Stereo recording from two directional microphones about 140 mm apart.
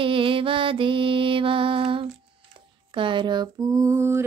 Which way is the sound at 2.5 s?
35° right (ahead or behind).